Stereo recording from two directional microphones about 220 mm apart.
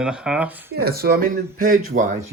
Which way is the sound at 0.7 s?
45° right (ahead or behind).